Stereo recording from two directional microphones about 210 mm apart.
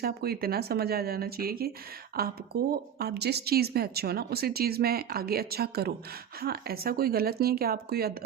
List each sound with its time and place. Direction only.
0.0 s speech: 45° right (ahead or behind)